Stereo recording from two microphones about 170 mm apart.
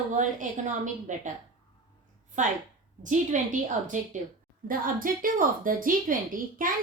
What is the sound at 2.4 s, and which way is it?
A woman's voice, 45° right (ahead or behind).